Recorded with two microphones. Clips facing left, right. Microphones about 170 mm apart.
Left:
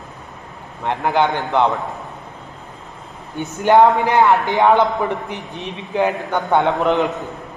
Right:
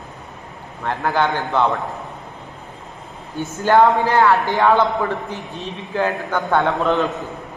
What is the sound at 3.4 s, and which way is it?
A man's voice, 20° left (ahead or behind).